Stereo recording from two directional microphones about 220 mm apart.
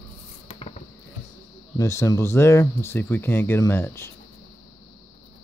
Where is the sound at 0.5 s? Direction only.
30° left (ahead or behind).